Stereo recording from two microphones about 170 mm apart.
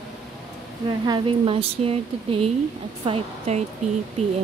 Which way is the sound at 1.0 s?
30° right (ahead or behind).